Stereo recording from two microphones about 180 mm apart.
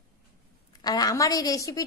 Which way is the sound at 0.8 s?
20° left (ahead or behind).